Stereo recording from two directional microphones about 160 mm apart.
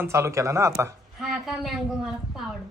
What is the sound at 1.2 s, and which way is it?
A woman's voice, centre (ahead or behind).